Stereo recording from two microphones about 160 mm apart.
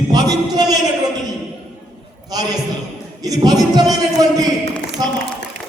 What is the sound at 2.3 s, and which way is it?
Speech, 25° right (ahead or behind).